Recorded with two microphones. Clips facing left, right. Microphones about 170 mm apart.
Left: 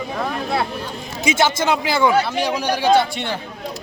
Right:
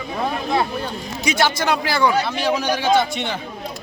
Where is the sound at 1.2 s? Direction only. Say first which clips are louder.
Left 2 dB; 20° left (ahead or behind).